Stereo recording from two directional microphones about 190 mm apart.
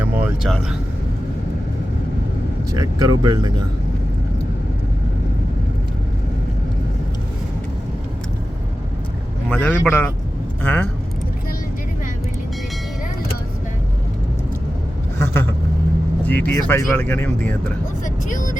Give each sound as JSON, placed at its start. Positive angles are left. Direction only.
{"t": 0.0, "sound": "speech", "side_deg": 0}
{"t": 2.7, "sound": "speech", "side_deg": -20}
{"t": 9.5, "sound": "speech", "side_deg": 10}
{"t": 15.2, "sound": "speech", "side_deg": 10}
{"t": 18.0, "sound": "speech", "side_deg": 45}